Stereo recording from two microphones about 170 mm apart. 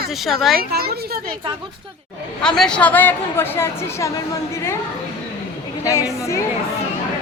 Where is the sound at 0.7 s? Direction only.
65° right (ahead or behind).